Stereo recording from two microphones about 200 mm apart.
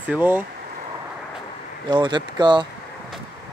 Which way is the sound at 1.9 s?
20° right (ahead or behind).